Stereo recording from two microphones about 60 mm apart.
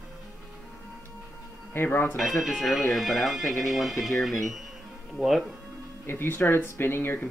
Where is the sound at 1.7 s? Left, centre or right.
Left.